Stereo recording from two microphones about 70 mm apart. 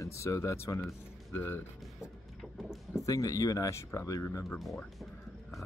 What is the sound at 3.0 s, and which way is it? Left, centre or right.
Speech, left.